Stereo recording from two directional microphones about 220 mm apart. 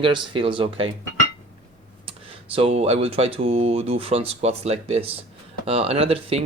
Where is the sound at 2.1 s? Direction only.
25° right (ahead or behind).